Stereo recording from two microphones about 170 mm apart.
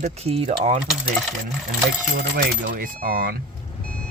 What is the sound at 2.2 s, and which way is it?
Speech, 90° right.